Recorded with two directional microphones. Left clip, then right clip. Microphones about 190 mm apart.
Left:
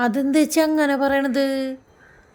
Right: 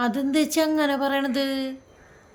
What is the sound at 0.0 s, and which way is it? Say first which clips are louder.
Speech: left 4 dB; 30° left (ahead or behind).